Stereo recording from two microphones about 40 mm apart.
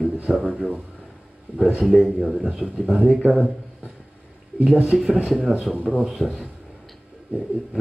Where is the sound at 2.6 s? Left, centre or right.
Right.